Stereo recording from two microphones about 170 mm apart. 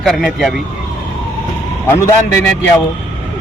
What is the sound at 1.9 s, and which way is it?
Speech, 15° left (ahead or behind).